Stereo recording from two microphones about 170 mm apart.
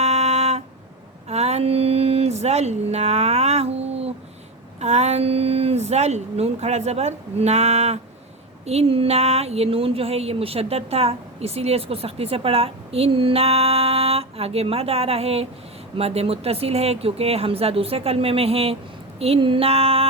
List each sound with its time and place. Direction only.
0.0 s music: 40° right (ahead or behind)
1.3 s a sound: 40° right (ahead or behind)
4.8 s speech: 40° right (ahead or behind)